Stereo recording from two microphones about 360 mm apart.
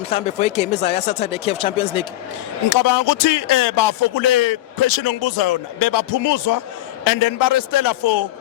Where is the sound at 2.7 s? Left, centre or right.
Left.